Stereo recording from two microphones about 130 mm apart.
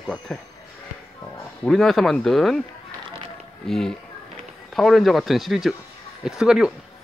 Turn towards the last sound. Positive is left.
turn(degrees=-5)  # may be behind; listen again after turning